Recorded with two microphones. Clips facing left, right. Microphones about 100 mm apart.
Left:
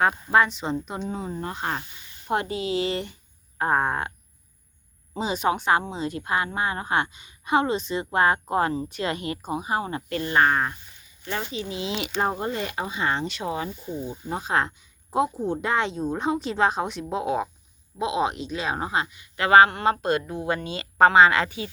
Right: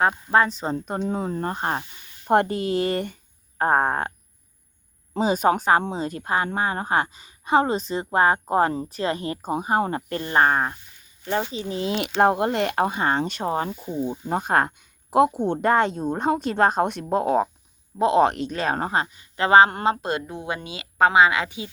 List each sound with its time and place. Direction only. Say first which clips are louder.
0.3 s a woman's voice: right 1 dB; 35° right (ahead or behind)
2.2 s a woman's voice: right 6 dB; 55° right (ahead or behind)
5.2 s a woman's voice: right 4 dB; 45° right (ahead or behind)
10.2 s a woman's voice: right 1 dB; 30° right (ahead or behind); by 12.1 s 50° right (ahead or behind)
12.1 s speech: right 8 dB; 65° right (ahead or behind)
15.6 s speech: right 6 dB; 45° right (ahead or behind)
18.0 s a woman's voice: right 7 dB; 60° right (ahead or behind); by 20.5 s 25° right (ahead or behind)
20.5 s speech: left 4 dB; 10° right (ahead or behind)